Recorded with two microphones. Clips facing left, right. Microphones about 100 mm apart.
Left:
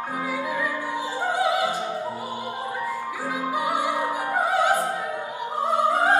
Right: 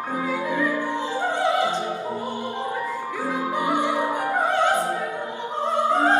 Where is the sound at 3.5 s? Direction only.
5° left (ahead or behind).